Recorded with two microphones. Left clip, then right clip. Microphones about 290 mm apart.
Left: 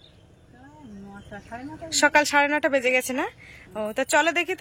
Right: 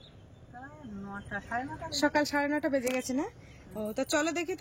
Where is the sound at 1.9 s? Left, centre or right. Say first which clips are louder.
Left 9 dB; centre.